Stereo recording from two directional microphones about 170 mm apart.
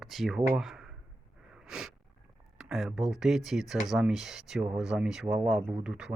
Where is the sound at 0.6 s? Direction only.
Centre (ahead or behind).